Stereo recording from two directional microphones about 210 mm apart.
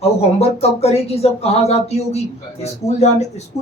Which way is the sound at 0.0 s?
30° left (ahead or behind).